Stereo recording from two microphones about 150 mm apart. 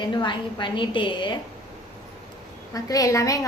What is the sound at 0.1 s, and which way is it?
A woman's voice, 30° left (ahead or behind).